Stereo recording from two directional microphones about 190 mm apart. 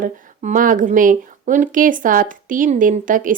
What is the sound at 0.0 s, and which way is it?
Speech, 45° right (ahead or behind).